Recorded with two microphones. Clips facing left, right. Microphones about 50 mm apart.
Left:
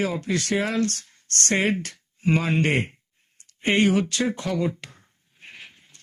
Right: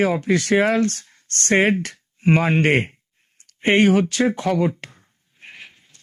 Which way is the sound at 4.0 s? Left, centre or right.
Right.